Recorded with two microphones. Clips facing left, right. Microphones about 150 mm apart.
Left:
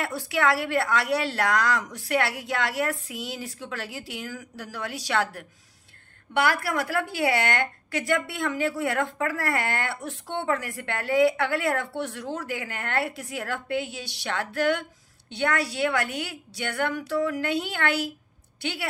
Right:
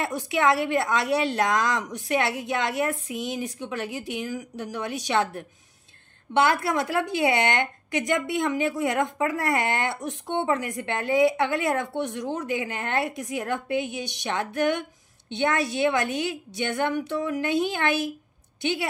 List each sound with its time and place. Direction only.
0.0 s a woman's voice: 20° right (ahead or behind)